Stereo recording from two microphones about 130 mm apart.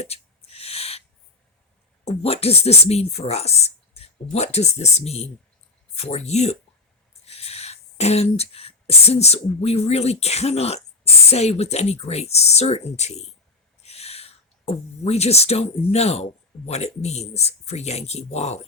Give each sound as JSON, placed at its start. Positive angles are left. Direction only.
{"t": 0.0, "sound": "owl", "side_deg": 50}
{"t": 2.0, "sound": "speech", "side_deg": 50}